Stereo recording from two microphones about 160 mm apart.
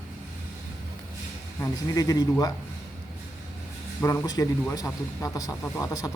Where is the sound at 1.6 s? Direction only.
25° left (ahead or behind).